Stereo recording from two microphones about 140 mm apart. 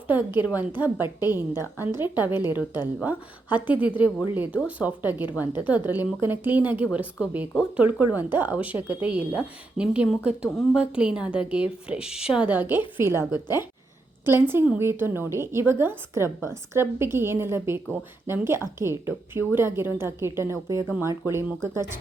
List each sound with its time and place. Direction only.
0.1 s a woman's voice: 15° right (ahead or behind)
13.3 s a woman's voice: 30° left (ahead or behind)
14.3 s a woman's voice: 15° right (ahead or behind)